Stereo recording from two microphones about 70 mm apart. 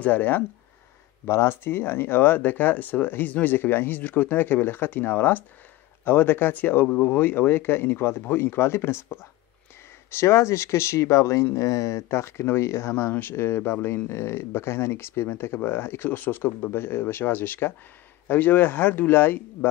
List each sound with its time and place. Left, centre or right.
0.0 s speech: left
1.2 s speech: left